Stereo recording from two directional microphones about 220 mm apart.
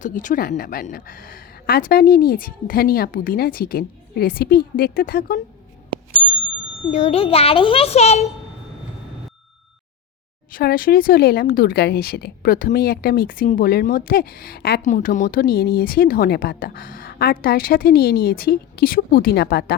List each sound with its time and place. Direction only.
0.0 s speech: 35° left (ahead or behind)
6.9 s a child's voice: 30° left (ahead or behind)
10.5 s speech: 40° left (ahead or behind)